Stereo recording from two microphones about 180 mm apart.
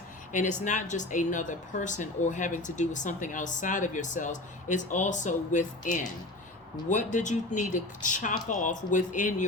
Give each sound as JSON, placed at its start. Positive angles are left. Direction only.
{"t": 0.3, "sound": "speech", "side_deg": 45}